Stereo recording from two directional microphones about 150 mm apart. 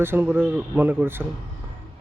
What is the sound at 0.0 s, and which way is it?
A man's voice, 15° right (ahead or behind).